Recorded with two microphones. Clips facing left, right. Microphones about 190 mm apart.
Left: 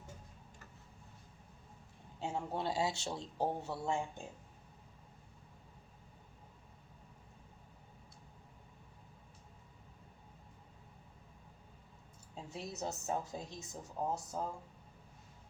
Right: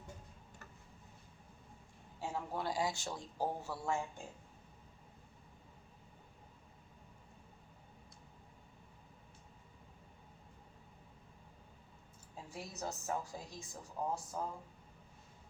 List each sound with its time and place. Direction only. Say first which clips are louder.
2.2 s a woman's voice: left 2 dB; 25° left (ahead or behind)
12.5 s a woman's voice: left 2 dB; 20° left (ahead or behind)